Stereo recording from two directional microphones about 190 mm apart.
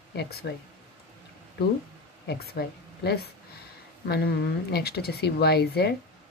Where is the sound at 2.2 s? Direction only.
60° left (ahead or behind).